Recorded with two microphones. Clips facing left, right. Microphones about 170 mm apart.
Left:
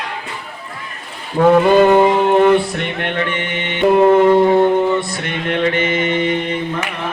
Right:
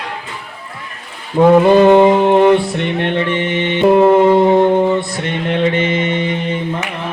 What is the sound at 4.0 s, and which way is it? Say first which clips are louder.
Music: left 1 dB; 15° right (ahead or behind).